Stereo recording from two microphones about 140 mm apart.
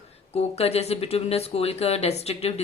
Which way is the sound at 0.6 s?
50° left (ahead or behind).